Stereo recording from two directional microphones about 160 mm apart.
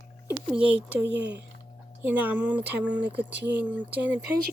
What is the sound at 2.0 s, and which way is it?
Speech, 10° right (ahead or behind).